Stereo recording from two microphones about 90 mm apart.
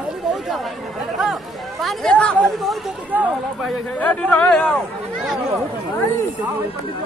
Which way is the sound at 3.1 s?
15° right (ahead or behind).